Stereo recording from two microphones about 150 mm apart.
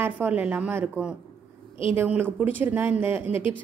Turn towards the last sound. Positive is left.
turn(degrees=-15)  # may be behind; listen again after turning